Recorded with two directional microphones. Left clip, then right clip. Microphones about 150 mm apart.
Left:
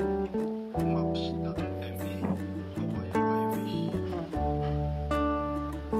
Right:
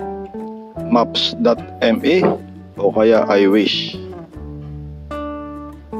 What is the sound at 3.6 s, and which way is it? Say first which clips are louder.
Speech: right 15 dB; 55° left (ahead or behind).